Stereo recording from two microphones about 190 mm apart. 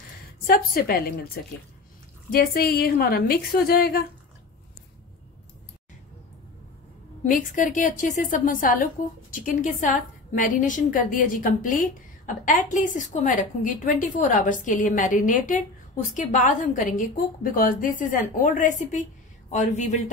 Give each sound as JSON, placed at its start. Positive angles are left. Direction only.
{"t": 0.5, "sound": "a woman's voice", "side_deg": 50}
{"t": 7.2, "sound": "a woman's voice", "side_deg": 45}